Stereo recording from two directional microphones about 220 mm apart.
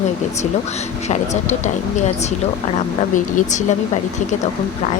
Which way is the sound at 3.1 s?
35° left (ahead or behind).